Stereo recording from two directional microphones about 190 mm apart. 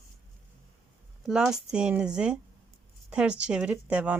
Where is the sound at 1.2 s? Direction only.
5° right (ahead or behind).